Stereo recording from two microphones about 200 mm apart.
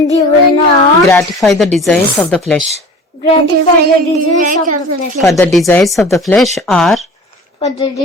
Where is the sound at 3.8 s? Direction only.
45° right (ahead or behind).